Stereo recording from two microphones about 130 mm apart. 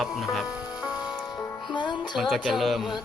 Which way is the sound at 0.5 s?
10° right (ahead or behind).